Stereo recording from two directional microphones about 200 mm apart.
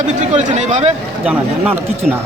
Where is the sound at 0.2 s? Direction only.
35° right (ahead or behind).